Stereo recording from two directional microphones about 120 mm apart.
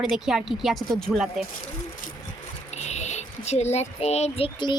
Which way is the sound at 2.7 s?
70° left (ahead or behind).